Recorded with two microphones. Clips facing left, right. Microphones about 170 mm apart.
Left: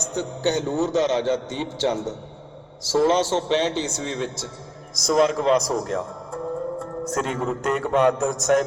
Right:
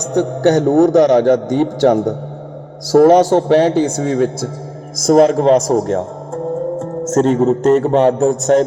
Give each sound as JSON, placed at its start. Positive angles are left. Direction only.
{"t": 0.1, "sound": "a man's voice", "side_deg": -65}
{"t": 2.9, "sound": "a man's voice", "side_deg": -60}